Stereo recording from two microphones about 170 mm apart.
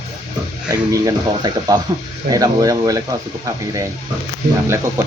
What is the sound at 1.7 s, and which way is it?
Speech, 25° right (ahead or behind).